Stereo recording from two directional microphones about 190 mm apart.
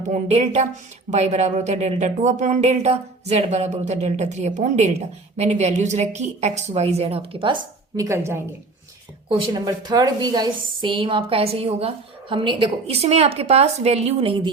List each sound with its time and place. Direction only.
0.1 s speech: 35° right (ahead or behind)
9.5 s a woman's voice: 20° right (ahead or behind)